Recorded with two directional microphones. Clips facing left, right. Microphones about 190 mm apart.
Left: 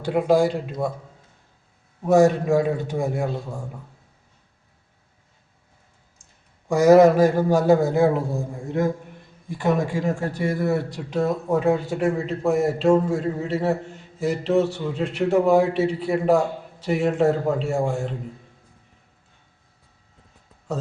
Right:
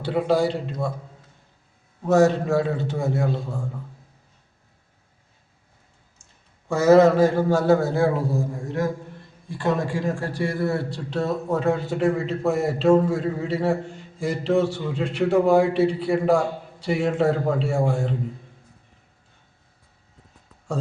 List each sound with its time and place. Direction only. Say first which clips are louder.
0.0 s a man's voice: left 2 dB; 10° left (ahead or behind)
2.0 s a man's voice: left 1 dB; 15° left (ahead or behind)
6.7 s a man's voice: left 2 dB; 15° left (ahead or behind)
9.5 s a man's voice: left 2 dB; 20° left (ahead or behind)